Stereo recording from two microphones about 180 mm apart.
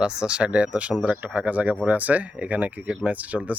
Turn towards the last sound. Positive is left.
turn(degrees=-10)  # may be behind; listen again after turning